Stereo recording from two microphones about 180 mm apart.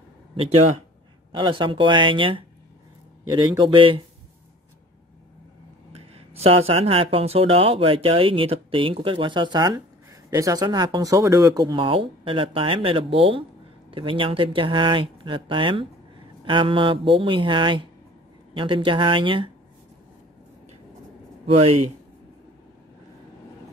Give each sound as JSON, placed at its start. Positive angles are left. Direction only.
{"t": 1.3, "sound": "speech", "side_deg": -25}
{"t": 5.9, "sound": "speech", "side_deg": -35}
{"t": 21.5, "sound": "speech", "side_deg": -30}